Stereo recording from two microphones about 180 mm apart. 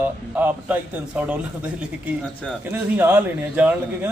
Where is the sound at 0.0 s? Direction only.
10° right (ahead or behind).